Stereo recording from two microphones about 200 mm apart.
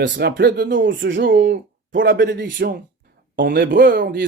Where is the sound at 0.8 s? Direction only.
70° right (ahead or behind).